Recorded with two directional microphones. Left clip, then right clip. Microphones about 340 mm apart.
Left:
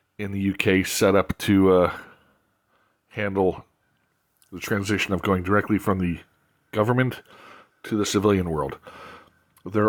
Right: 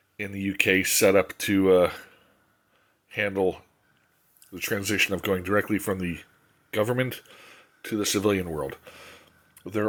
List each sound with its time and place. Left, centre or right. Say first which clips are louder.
0.2 s speech: even; left